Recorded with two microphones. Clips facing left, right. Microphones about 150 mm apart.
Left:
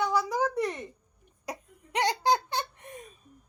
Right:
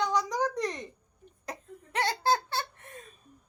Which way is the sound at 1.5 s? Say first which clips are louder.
Left 2 dB; 15° left (ahead or behind).